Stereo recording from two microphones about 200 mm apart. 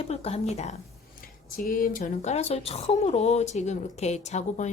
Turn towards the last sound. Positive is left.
turn(degrees=35)  # may be behind; listen again after turning